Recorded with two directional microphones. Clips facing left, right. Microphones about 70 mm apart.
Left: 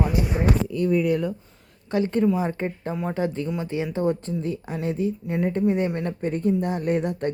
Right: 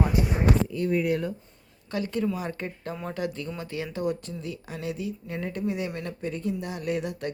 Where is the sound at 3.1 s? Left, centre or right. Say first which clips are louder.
Left 5 dB; left.